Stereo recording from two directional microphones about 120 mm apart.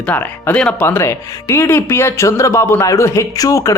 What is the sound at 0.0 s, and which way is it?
Speech, 15° left (ahead or behind).